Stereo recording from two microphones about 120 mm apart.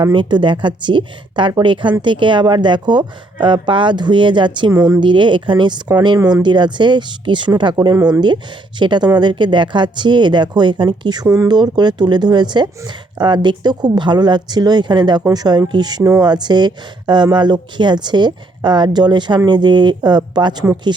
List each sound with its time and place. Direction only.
0.0 s speech: 40° right (ahead or behind)